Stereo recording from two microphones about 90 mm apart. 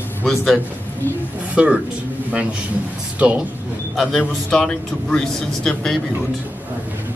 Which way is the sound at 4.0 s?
Centre (ahead or behind).